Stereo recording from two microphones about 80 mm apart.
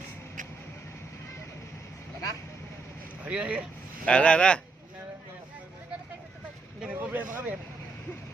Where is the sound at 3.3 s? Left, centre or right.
Centre.